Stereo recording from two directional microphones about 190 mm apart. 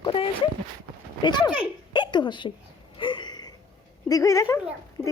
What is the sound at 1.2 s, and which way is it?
Speech, 25° left (ahead or behind).